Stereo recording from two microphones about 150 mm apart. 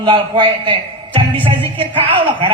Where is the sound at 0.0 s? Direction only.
35° right (ahead or behind).